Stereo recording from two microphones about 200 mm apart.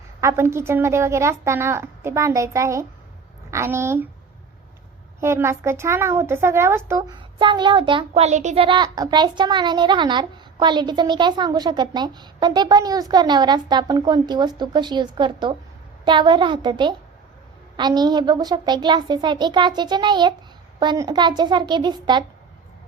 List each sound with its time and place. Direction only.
0.2 s a child's voice: 15° right (ahead or behind)
5.2 s a woman's voice: 15° right (ahead or behind)